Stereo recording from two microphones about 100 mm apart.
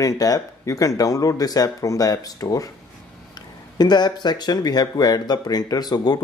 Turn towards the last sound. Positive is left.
turn(degrees=40)  # may be behind; listen again after turning